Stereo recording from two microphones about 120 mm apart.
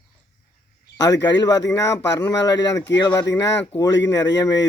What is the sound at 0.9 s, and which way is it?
Speech, 30° left (ahead or behind).